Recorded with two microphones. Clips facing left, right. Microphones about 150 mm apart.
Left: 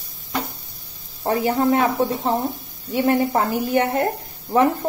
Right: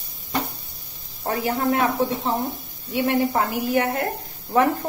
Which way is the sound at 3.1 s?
30° left (ahead or behind).